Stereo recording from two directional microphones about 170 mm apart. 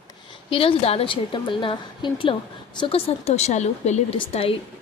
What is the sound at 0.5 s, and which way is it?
A woman's voice, 35° left (ahead or behind).